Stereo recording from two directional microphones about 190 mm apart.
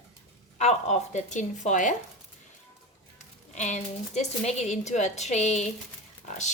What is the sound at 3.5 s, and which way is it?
Speech, 40° left (ahead or behind).